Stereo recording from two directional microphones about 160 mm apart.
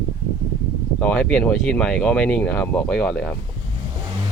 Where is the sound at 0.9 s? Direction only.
10° left (ahead or behind).